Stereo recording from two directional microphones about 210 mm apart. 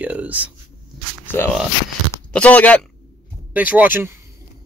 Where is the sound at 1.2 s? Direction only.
10° left (ahead or behind).